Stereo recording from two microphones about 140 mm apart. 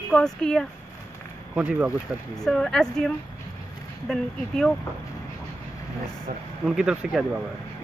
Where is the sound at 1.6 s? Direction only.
10° right (ahead or behind).